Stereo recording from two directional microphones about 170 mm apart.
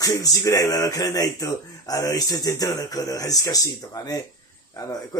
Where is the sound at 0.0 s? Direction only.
20° left (ahead or behind).